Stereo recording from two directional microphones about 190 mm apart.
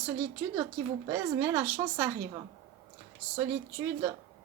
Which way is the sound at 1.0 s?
15° right (ahead or behind).